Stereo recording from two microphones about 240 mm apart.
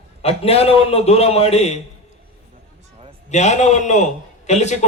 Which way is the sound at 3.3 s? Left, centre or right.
Left.